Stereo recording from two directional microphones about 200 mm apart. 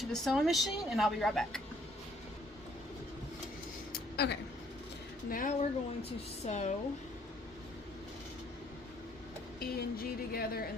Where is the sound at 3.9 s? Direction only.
55° left (ahead or behind).